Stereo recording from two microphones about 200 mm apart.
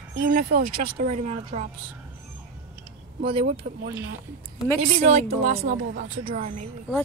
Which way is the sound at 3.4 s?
55° right (ahead or behind).